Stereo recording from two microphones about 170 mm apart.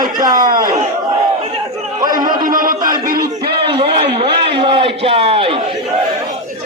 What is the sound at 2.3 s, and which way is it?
Music, 55° right (ahead or behind).